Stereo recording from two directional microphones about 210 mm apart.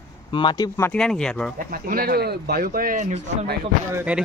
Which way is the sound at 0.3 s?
20° left (ahead or behind).